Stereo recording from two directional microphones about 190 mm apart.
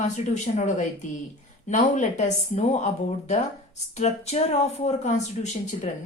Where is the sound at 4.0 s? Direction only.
35° left (ahead or behind).